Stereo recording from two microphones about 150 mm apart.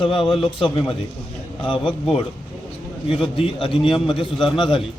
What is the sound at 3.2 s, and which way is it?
A man's voice, 35° left (ahead or behind).